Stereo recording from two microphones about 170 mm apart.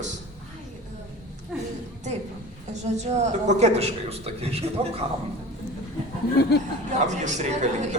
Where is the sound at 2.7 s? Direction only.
40° right (ahead or behind).